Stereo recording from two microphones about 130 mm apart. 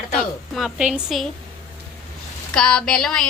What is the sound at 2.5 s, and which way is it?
Speech, 5° left (ahead or behind).